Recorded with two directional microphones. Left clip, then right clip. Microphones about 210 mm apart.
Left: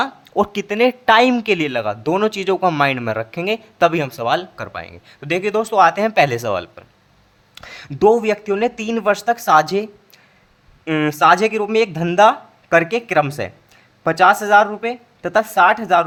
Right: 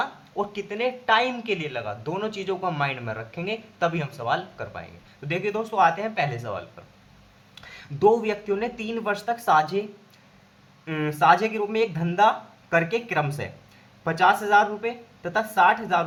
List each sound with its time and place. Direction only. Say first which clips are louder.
0.0 s speech: left 9 dB; 50° left (ahead or behind)
10.8 s speech: left 6 dB; 45° left (ahead or behind)